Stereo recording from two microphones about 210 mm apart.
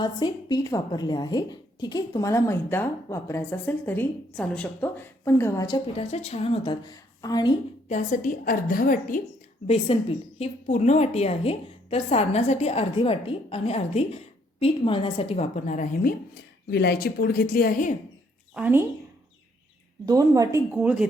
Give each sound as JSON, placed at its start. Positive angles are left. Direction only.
{"t": 0.0, "sound": "a woman's voice", "side_deg": 20}
{"t": 7.9, "sound": "a woman's voice", "side_deg": 40}
{"t": 9.6, "sound": "a woman's voice", "side_deg": 25}
{"t": 16.6, "sound": "a woman's voice", "side_deg": 50}
{"t": 18.5, "sound": "a woman's voice", "side_deg": -10}
{"t": 20.1, "sound": "a woman's voice", "side_deg": -15}
{"t": 20.7, "sound": "speech", "side_deg": -5}